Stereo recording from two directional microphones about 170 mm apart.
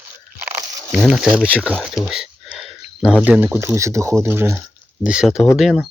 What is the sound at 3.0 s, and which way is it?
Speech, 10° left (ahead or behind).